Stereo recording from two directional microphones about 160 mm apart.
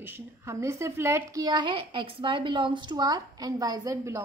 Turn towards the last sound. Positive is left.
turn(degrees=-20)  # may be behind; listen again after turning